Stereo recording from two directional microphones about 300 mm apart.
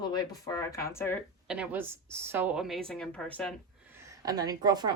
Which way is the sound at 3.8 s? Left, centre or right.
Centre.